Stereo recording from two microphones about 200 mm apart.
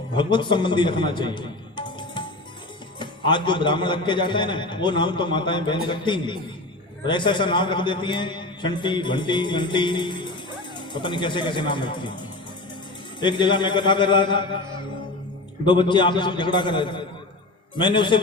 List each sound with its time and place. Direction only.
0.1 s a man's voice: 25° left (ahead or behind)
15.6 s a man's voice: 25° left (ahead or behind)